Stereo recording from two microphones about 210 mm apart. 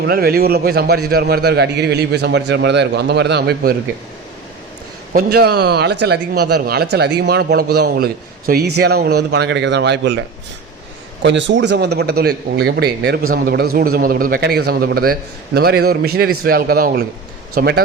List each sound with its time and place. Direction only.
0.0 s a man's voice: 45° right (ahead or behind)
5.1 s a man's voice: 50° right (ahead or behind)